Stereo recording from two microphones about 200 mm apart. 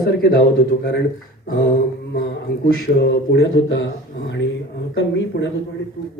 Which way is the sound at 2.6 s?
55° left (ahead or behind).